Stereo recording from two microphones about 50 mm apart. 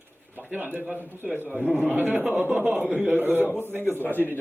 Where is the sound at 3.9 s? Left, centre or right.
Left.